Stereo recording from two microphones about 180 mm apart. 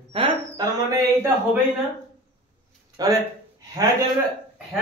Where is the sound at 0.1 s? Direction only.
25° right (ahead or behind).